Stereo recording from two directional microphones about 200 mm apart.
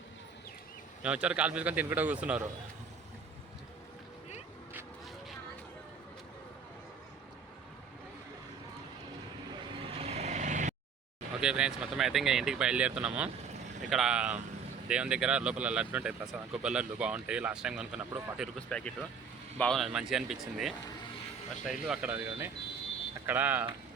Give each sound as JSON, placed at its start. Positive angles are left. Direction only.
{"t": 1.0, "sound": "a man's voice", "side_deg": -5}
{"t": 9.8, "sound": "vehicle", "side_deg": -30}
{"t": 11.3, "sound": "a man's voice", "side_deg": -5}